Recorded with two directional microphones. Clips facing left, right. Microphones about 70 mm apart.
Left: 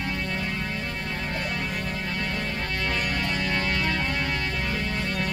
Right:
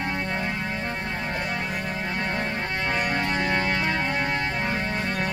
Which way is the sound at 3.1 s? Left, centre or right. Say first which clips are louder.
Right 3 dB; right.